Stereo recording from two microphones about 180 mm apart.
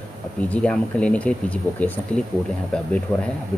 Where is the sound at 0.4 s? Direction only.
5° left (ahead or behind).